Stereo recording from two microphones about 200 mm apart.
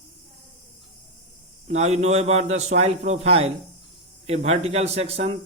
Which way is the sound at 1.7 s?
35° right (ahead or behind).